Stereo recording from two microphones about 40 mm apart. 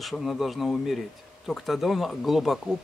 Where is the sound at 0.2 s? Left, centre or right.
Centre.